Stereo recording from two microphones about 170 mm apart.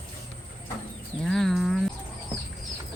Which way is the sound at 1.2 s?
Centre (ahead or behind).